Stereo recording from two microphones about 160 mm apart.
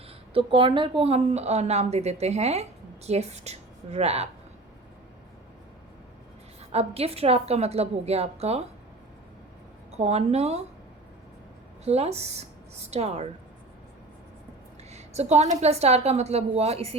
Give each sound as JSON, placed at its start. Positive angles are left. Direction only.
{"t": 0.3, "sound": "a woman's voice", "side_deg": -35}
{"t": 6.6, "sound": "a woman's voice", "side_deg": -40}
{"t": 10.0, "sound": "a woman's voice", "side_deg": -45}
{"t": 11.9, "sound": "a woman's voice", "side_deg": -40}
{"t": 14.8, "sound": "a woman's voice", "side_deg": -45}